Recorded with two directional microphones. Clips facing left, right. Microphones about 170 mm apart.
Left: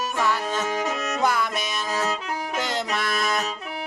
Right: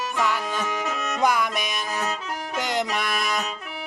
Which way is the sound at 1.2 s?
15° right (ahead or behind).